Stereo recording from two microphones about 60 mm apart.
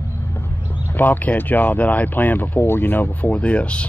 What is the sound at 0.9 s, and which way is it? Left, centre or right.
Speech, left.